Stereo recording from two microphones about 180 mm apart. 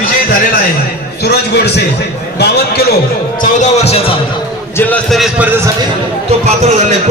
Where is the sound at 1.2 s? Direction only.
65° left (ahead or behind).